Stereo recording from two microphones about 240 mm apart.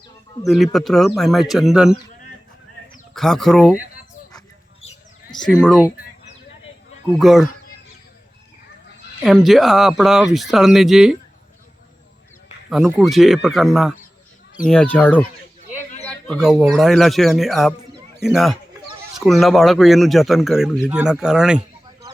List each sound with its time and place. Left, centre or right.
0.4 s speech: centre
3.2 s speech: centre
4.3 s a sound: centre
5.6 s speech: centre
7.2 s speech: centre
9.2 s speech: centre
12.7 s speech: centre
16.0 s chicken: centre
16.6 s speech: centre